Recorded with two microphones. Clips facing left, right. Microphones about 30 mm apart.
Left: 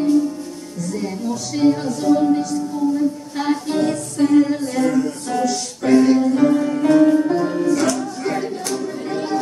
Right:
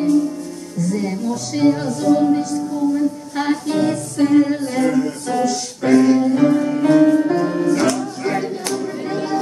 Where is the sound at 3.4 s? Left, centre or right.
Centre.